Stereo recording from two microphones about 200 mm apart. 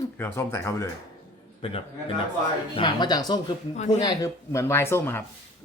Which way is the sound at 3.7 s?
35° left (ahead or behind).